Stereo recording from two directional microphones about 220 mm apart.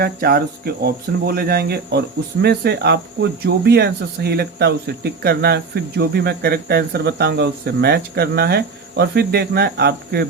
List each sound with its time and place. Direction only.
0.0 s speech: 45° right (ahead or behind)